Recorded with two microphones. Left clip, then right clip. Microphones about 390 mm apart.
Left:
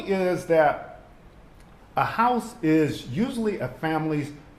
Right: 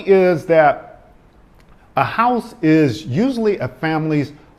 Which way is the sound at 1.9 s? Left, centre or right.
Right.